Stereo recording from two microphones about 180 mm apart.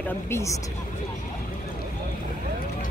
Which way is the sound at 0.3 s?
15° left (ahead or behind).